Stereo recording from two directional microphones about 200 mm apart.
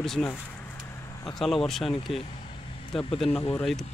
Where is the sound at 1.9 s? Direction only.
25° left (ahead or behind).